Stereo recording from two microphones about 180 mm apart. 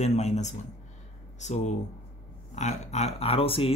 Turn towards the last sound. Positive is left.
turn(degrees=30)  # may be behind; listen again after turning